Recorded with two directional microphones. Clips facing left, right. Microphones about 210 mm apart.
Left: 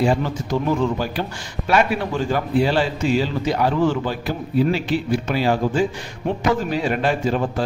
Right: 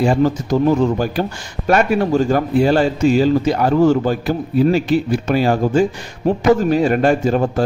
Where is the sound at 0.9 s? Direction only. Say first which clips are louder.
Right 5 dB; 45° right (ahead or behind).